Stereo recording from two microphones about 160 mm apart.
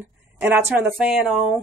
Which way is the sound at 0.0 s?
10° right (ahead or behind).